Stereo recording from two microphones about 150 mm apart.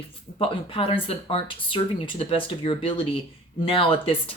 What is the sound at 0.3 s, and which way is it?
Speech, 35° left (ahead or behind).